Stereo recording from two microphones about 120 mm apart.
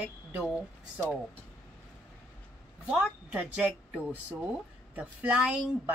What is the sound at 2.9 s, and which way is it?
A woman's voice, 10° right (ahead or behind).